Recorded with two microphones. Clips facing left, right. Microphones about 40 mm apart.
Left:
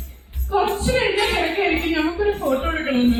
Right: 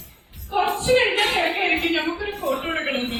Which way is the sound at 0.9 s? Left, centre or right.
Right.